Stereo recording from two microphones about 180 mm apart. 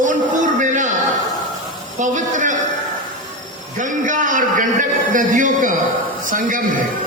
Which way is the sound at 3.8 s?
45° right (ahead or behind).